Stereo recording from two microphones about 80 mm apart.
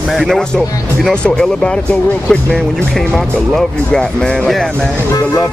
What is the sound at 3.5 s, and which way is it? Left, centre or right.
Speech, centre.